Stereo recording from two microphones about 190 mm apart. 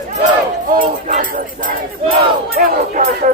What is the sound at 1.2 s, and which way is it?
Speech, 45° right (ahead or behind).